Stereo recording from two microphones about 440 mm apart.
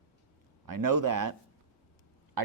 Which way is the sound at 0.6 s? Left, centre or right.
Right.